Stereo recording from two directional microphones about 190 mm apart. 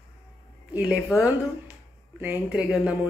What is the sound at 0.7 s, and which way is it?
Speech, 5° right (ahead or behind).